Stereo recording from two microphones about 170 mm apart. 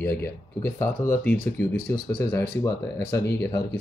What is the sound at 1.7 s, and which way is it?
Speech, 65° left (ahead or behind).